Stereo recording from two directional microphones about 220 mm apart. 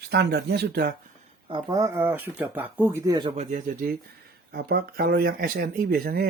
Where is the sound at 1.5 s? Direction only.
20° right (ahead or behind).